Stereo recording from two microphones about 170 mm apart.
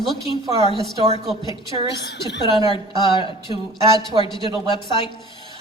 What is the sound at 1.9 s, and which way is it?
Speech, 85° left.